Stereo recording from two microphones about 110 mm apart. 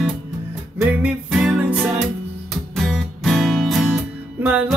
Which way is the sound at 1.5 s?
15° right (ahead or behind).